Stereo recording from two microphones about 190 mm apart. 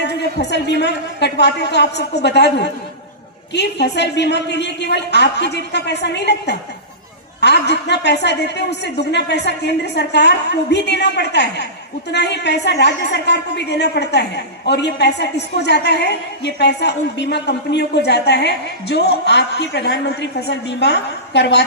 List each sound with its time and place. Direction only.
0.0 s a woman's voice: 60° left (ahead or behind)